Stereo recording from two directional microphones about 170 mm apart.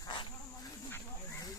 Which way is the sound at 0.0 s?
25° left (ahead or behind).